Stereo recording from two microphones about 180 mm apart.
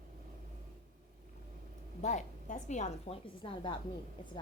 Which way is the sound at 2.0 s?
40° left (ahead or behind).